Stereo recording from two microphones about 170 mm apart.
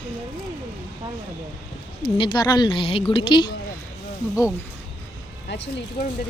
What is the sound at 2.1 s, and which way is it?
A woman's voice, 25° left (ahead or behind).